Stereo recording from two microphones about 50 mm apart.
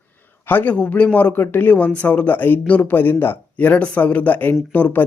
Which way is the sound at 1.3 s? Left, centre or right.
Left.